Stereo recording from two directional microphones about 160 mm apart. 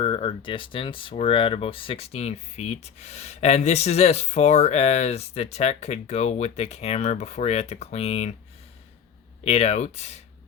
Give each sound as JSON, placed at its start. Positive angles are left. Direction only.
{"t": 0.0, "sound": "speech", "side_deg": 35}
{"t": 9.4, "sound": "speech", "side_deg": 40}